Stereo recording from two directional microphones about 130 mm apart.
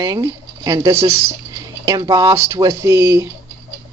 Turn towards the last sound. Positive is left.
turn(degrees=-20)  # may be behind; listen again after turning